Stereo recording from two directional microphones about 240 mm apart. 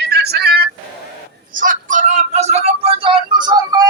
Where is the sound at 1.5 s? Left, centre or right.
Right.